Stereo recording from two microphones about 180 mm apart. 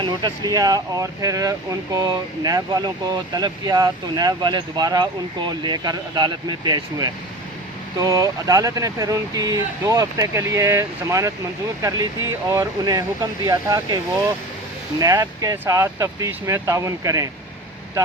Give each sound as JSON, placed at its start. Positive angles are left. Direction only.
{"t": 0.0, "sound": "speech", "side_deg": -25}